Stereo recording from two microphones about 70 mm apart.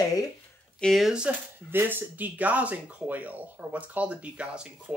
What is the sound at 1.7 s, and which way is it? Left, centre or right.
A man's voice, right.